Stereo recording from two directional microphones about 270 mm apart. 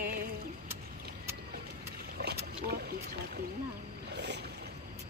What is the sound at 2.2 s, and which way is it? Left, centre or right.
Boat, right.